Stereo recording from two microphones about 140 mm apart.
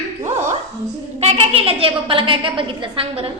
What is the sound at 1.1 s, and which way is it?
A woman's voice, 45° right (ahead or behind).